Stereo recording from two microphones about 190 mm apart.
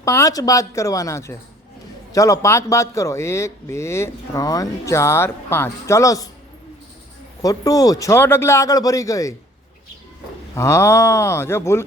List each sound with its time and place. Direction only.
0.0 s a man's voice: 15° left (ahead or behind)
7.4 s a man's voice: 20° left (ahead or behind)
10.5 s a man's voice: 15° left (ahead or behind)